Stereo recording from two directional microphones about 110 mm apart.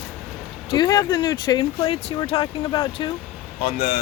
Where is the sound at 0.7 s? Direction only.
40° left (ahead or behind).